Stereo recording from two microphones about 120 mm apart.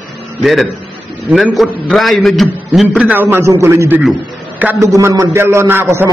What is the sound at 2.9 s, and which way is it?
A man's voice, 15° right (ahead or behind).